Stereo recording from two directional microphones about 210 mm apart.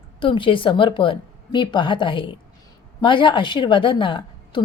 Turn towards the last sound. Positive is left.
turn(degrees=25)  # may be behind; listen again after turning